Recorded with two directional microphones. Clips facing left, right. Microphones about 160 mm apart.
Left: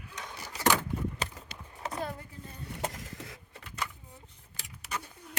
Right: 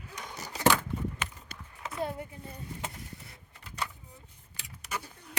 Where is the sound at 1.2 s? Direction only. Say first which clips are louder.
Left 2 dB; 35° left (ahead or behind).